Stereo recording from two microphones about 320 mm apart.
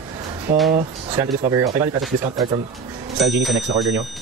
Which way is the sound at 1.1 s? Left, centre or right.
Centre.